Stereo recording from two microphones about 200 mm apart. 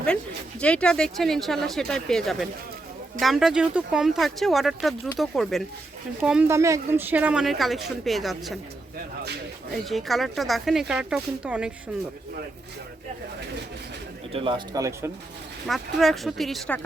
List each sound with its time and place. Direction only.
0.6 s speech: 5° left (ahead or behind)
9.9 s speech: centre (ahead or behind)
14.3 s speech: 25° right (ahead or behind)
15.6 s speech: centre (ahead or behind)